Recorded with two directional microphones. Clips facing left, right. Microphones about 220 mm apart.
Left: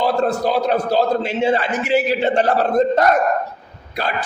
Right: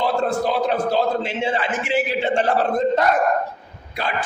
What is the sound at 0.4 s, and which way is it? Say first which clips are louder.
A man's voice: left 2 dB; 40° left (ahead or behind).